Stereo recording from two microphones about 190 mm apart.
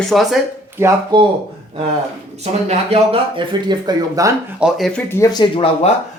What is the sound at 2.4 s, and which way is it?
Speech, 35° right (ahead or behind).